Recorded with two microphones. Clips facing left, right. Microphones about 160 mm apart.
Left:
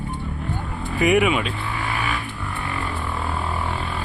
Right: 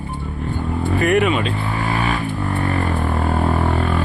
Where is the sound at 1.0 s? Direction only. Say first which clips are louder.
Even; 10° left (ahead or behind).